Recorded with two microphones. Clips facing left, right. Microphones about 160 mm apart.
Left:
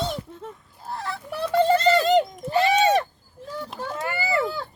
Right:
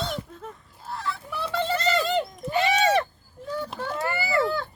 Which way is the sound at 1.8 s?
40° left (ahead or behind).